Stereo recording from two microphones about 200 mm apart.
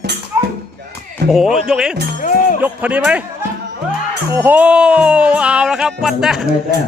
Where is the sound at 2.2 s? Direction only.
45° left (ahead or behind).